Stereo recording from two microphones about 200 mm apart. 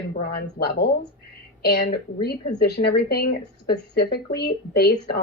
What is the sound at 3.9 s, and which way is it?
A woman's voice, 50° left (ahead or behind).